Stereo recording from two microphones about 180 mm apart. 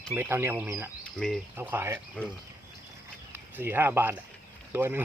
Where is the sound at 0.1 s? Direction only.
10° right (ahead or behind).